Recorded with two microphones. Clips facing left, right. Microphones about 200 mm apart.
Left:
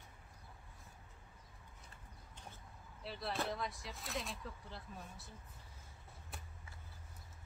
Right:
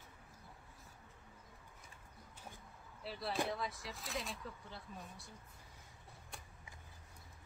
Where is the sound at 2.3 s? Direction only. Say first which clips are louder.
Right 1 dB; 5° right (ahead or behind).